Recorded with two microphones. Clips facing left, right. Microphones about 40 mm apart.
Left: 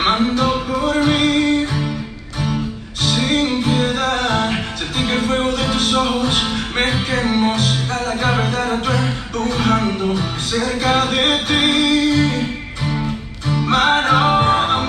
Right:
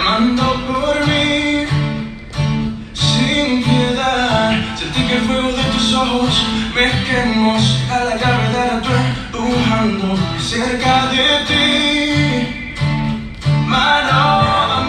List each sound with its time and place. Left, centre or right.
0.0 s music: centre
3.0 s music: right
13.5 s music: right